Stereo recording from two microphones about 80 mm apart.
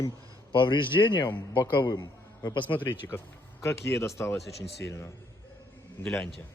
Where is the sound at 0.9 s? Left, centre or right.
Left.